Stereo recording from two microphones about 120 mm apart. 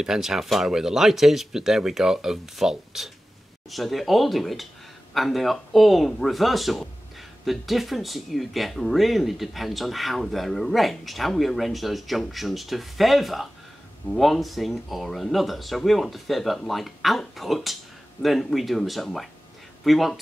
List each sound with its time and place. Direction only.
0.0 s speech: 5° right (ahead or behind)